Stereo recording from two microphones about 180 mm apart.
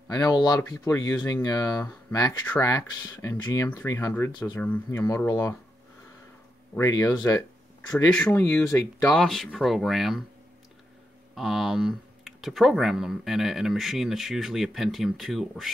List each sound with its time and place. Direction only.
0.1 s speech: 20° left (ahead or behind)
4.6 s speech: 10° left (ahead or behind)
6.8 s speech: 15° left (ahead or behind); by 10.2 s centre (ahead or behind)
11.3 s speech: centre (ahead or behind)